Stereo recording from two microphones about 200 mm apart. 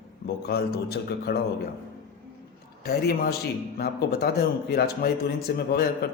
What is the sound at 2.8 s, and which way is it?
A man's voice, 50° left (ahead or behind).